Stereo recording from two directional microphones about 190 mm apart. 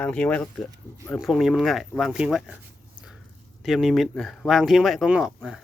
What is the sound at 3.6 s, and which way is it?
Speech, centre (ahead or behind).